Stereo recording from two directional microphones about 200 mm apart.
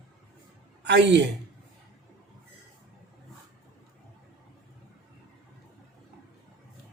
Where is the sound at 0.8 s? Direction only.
60° right (ahead or behind).